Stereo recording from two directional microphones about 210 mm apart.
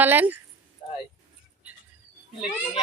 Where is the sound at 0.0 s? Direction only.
10° right (ahead or behind).